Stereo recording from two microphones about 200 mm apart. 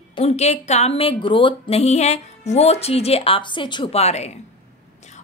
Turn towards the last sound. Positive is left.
turn(degrees=30)  # may be behind; listen again after turning